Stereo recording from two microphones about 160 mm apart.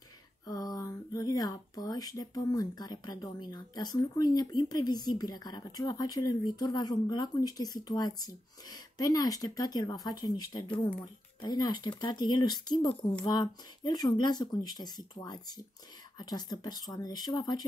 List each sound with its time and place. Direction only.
0.5 s speech: 25° left (ahead or behind)